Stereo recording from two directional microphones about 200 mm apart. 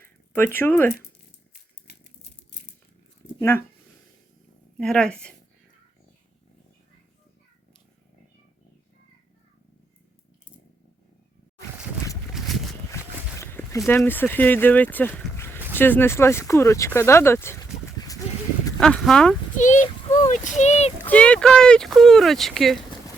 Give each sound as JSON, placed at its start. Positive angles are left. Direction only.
{"t": 0.0, "sound": "speech", "side_deg": 10}
{"t": 4.8, "sound": "speech", "side_deg": 5}
{"t": 12.4, "sound": "a sound", "side_deg": 0}
{"t": 13.4, "sound": "speech", "side_deg": 10}
{"t": 18.8, "sound": "speech", "side_deg": 5}
{"t": 19.5, "sound": "a child's voice", "side_deg": 40}
{"t": 21.0, "sound": "speech", "side_deg": 5}